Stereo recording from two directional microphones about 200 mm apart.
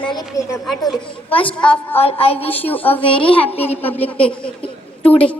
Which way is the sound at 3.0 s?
25° left (ahead or behind).